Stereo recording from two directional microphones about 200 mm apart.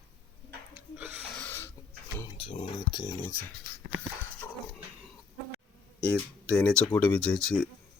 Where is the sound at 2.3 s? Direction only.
30° left (ahead or behind).